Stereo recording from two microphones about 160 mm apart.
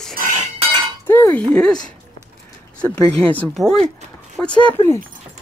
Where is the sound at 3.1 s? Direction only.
10° left (ahead or behind).